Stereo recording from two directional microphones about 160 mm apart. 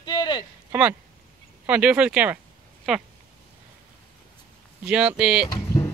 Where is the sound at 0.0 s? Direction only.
25° left (ahead or behind).